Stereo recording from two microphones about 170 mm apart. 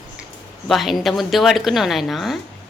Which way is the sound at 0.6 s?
Centre (ahead or behind).